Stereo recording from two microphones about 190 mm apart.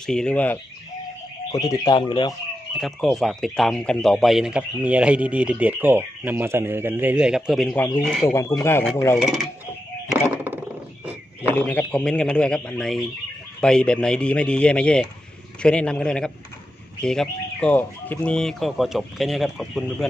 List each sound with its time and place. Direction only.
0.0 s speech: 5° left (ahead or behind)
1.5 s speech: 20° left (ahead or behind)
2.8 s speech: centre (ahead or behind)
8.3 s speech: 15° left (ahead or behind)
9.2 s speech: centre (ahead or behind)
10.0 s a sound: 10° right (ahead or behind)
11.4 s speech: 10° left (ahead or behind)